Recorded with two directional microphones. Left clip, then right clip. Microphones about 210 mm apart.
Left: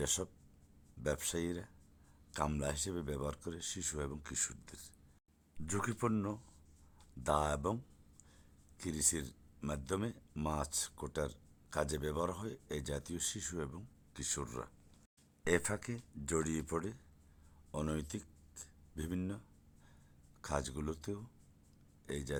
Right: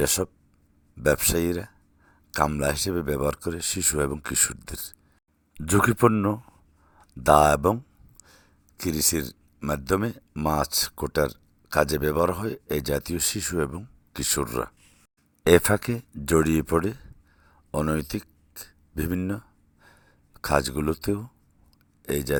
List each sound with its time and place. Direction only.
0.0 s speech: 25° right (ahead or behind)
7.2 s speech: 30° right (ahead or behind)
8.2 s a sound: 30° right (ahead or behind)
9.6 s speech: 25° right (ahead or behind)
17.7 s a sound: 30° right (ahead or behind)
22.0 s speech: 30° right (ahead or behind)